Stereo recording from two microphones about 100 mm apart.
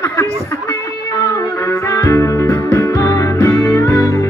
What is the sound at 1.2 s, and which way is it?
Music, 30° left (ahead or behind).